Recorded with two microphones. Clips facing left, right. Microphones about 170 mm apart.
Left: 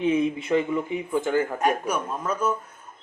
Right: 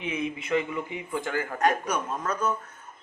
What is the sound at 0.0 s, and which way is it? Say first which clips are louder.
Speech: left 9 dB; 35° left (ahead or behind).